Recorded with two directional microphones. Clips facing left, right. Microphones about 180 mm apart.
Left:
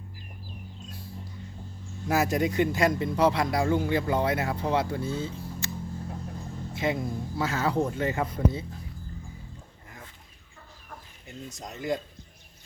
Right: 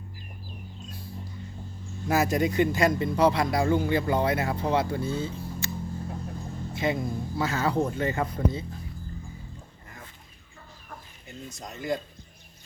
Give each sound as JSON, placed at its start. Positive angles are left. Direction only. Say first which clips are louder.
{"t": 2.0, "sound": "speech", "louder": "right 1 dB", "side_deg": 0}
{"t": 6.7, "sound": "speech", "louder": "right 1 dB", "side_deg": 0}
{"t": 11.4, "sound": "speech", "louder": "even", "side_deg": 15}